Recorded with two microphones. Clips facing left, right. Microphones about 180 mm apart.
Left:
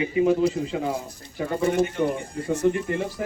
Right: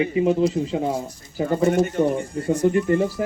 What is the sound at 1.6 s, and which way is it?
Speech, 45° right (ahead or behind).